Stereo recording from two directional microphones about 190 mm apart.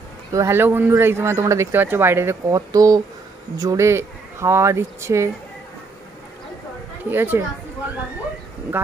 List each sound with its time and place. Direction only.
0.3 s speech: 15° right (ahead or behind)
7.1 s speech: 10° right (ahead or behind)
8.8 s speech: 10° right (ahead or behind)